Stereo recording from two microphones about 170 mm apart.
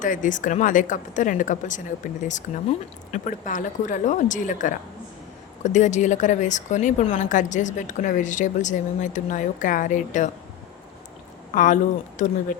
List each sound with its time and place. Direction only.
0.0 s a woman's voice: 50° left (ahead or behind)
11.5 s a woman's voice: 50° left (ahead or behind)